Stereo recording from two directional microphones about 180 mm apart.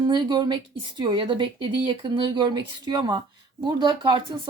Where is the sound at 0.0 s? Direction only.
25° right (ahead or behind).